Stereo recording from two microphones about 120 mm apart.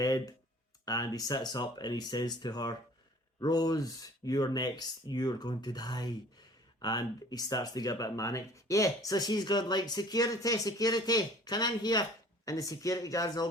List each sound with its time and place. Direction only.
0.0 s speech: 30° left (ahead or behind)